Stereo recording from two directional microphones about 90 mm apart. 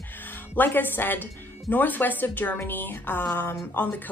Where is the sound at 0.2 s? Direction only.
20° left (ahead or behind).